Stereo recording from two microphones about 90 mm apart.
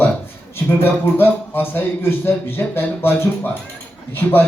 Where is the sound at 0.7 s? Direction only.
25° left (ahead or behind).